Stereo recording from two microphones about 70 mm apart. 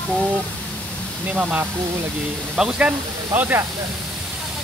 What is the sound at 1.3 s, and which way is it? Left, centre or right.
Speech, centre.